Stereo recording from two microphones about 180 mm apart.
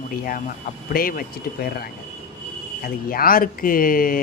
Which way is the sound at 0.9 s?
55° left (ahead or behind).